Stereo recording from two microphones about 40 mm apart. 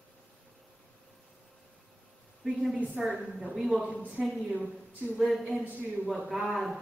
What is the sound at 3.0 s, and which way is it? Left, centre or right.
Speech, centre.